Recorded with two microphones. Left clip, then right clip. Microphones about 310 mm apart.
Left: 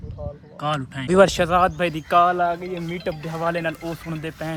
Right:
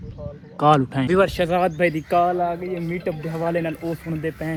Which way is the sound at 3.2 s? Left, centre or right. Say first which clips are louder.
Right 1 dB; left.